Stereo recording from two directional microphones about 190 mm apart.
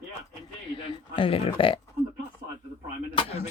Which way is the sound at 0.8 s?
30° left (ahead or behind).